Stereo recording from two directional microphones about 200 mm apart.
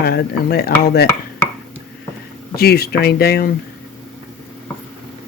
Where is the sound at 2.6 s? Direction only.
50° left (ahead or behind).